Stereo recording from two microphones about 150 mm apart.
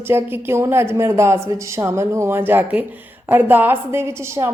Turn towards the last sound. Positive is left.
turn(degrees=-15)  # may be behind; listen again after turning